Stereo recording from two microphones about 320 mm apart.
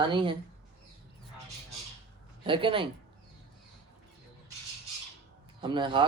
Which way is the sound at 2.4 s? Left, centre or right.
Centre.